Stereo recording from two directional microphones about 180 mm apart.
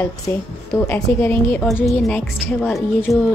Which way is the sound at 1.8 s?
Centre (ahead or behind).